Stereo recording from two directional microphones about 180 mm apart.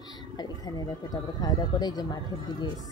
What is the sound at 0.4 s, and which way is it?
Speech, 20° left (ahead or behind).